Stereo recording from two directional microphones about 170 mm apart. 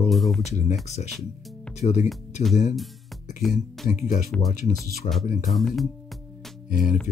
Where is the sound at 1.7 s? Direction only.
40° left (ahead or behind).